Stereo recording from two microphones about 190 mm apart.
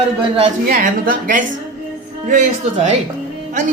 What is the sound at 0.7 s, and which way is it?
A woman's voice, 45° right (ahead or behind).